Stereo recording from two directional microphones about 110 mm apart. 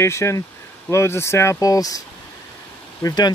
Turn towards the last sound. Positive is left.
turn(degrees=35)  # may be behind; listen again after turning